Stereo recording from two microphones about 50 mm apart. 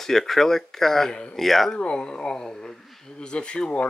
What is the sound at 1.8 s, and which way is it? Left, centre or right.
Speech, centre.